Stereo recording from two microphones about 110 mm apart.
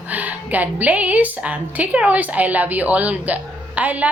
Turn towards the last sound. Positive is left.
turn(degrees=-15)  # may be behind; listen again after turning